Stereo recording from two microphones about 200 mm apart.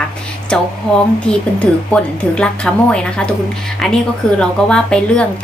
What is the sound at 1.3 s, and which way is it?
Speech, 5° left (ahead or behind).